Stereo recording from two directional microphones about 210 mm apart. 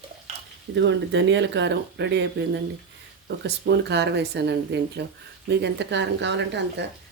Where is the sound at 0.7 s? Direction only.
60° right (ahead or behind).